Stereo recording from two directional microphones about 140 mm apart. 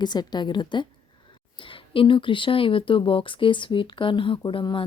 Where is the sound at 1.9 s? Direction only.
35° left (ahead or behind).